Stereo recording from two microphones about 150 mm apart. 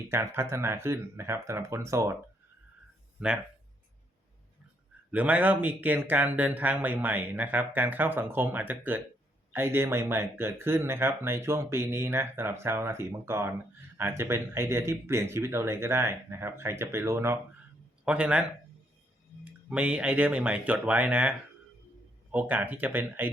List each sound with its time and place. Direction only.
0.1 s speech: 15° right (ahead or behind)
3.2 s speech: 5° right (ahead or behind)
5.1 s speech: 10° right (ahead or behind)
19.7 s speech: 10° right (ahead or behind)